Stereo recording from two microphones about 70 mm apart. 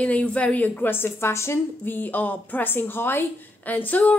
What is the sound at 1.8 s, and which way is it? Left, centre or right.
A woman's voice, left.